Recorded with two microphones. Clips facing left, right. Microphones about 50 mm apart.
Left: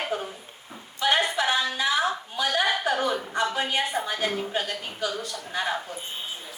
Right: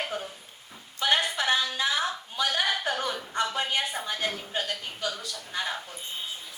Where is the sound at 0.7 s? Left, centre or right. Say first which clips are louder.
Left 2 dB; left.